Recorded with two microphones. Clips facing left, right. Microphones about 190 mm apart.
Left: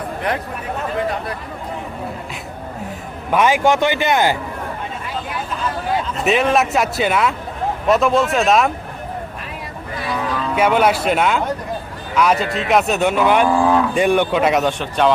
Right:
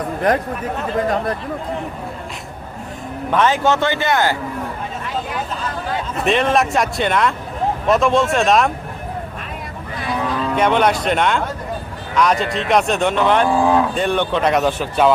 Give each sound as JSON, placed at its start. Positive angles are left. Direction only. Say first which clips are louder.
{"t": 0.3, "sound": "speech", "louder": "right 6 dB", "side_deg": -40}
{"t": 3.3, "sound": "a man's voice", "louder": "left 1 dB", "side_deg": 10}
{"t": 6.2, "sound": "speech", "louder": "even", "side_deg": 5}
{"t": 10.5, "sound": "a man's voice", "louder": "left 1 dB", "side_deg": 5}